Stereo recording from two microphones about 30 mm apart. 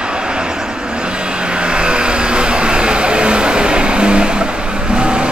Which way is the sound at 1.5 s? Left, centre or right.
Right.